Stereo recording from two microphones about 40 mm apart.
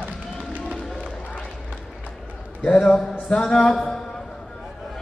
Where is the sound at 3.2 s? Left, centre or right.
Left.